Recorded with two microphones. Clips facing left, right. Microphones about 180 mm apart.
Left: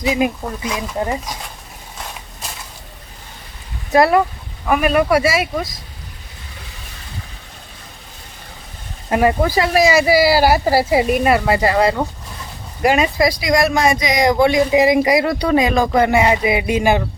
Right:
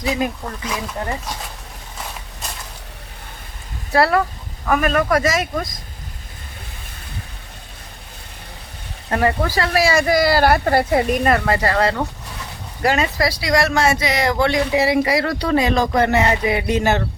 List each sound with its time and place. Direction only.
0.1 s speech: 15° left (ahead or behind)
3.9 s speech: 15° left (ahead or behind)
9.0 s speech: 15° left (ahead or behind)